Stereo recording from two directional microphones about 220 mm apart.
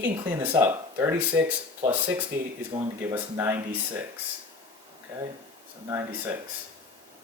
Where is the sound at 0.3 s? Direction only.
10° right (ahead or behind).